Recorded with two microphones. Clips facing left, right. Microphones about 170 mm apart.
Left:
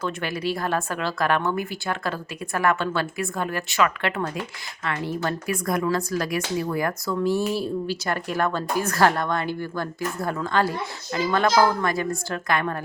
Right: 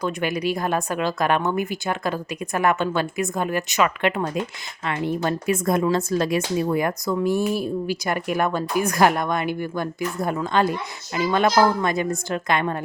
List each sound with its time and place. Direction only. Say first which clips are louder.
0.0 s speech: right 3 dB; 15° right (ahead or behind)